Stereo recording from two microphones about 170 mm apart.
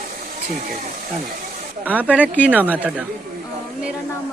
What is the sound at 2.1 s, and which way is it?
Speech, 10° right (ahead or behind).